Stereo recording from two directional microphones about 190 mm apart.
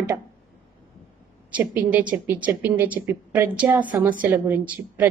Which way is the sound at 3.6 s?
20° right (ahead or behind).